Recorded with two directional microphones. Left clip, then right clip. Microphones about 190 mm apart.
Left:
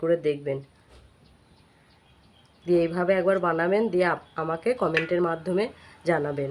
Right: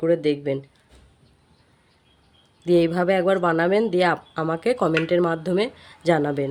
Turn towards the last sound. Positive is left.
turn(degrees=-55)  # may be behind; listen again after turning